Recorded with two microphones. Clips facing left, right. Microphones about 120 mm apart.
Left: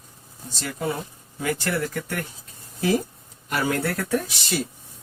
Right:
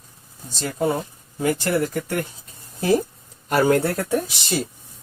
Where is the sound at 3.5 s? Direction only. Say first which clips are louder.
Right 7 dB; 40° right (ahead or behind); by 4.3 s 20° right (ahead or behind).